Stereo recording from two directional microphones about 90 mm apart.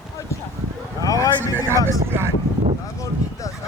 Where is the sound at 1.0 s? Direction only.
40° left (ahead or behind).